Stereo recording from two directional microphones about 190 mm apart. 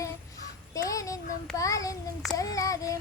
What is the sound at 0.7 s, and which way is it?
Child singing, 15° left (ahead or behind).